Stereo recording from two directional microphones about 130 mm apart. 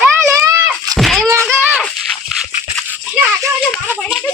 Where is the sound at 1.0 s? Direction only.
Centre (ahead or behind).